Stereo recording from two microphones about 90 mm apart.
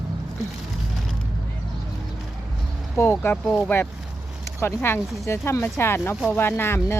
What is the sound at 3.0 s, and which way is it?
Speech, 25° left (ahead or behind).